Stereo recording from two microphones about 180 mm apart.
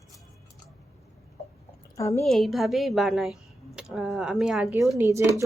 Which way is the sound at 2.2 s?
Centre (ahead or behind).